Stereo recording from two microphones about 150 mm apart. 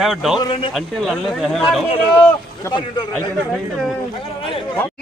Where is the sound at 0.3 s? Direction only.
30° left (ahead or behind).